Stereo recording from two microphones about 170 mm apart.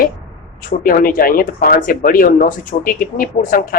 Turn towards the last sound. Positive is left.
turn(degrees=50)  # may be behind; listen again after turning